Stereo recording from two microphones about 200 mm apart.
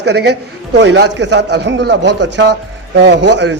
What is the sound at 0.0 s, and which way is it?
A man's voice, 55° right (ahead or behind).